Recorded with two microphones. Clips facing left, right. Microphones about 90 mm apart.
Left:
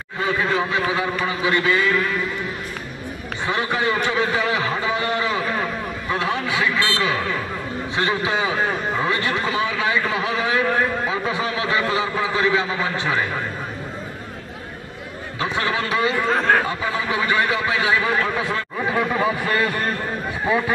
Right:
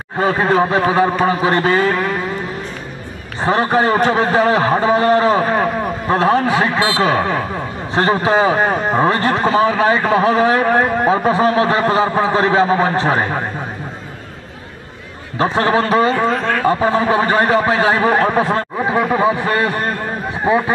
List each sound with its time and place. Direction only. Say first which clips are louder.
0.2 s a man's voice: right 7 dB; 40° right (ahead or behind)
3.4 s a man's voice: right 8 dB; 40° right (ahead or behind)
15.3 s a man's voice: right 8 dB; 40° right (ahead or behind)